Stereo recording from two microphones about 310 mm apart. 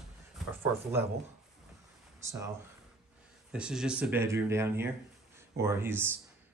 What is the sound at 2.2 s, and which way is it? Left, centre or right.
Speech, centre.